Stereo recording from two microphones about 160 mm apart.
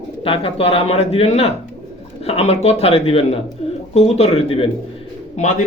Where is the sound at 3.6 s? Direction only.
40° left (ahead or behind).